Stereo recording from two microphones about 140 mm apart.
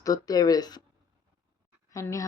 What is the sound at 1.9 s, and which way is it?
Speech, 25° left (ahead or behind).